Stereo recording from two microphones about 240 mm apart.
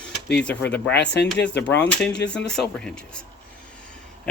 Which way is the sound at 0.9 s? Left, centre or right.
Left.